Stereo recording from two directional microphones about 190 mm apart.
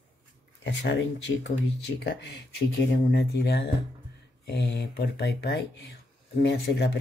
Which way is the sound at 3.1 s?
60° left (ahead or behind).